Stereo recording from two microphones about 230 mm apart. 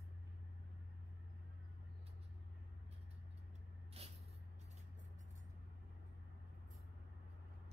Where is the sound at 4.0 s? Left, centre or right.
Right.